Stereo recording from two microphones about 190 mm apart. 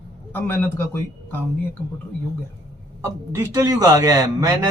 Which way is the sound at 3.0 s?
15° right (ahead or behind).